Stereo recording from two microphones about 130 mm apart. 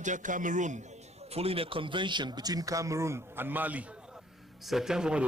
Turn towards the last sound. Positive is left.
turn(degrees=-5)  # may be behind; listen again after turning